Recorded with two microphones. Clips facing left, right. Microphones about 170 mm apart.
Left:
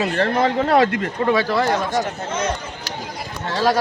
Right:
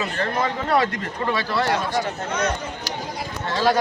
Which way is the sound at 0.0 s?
35° left (ahead or behind).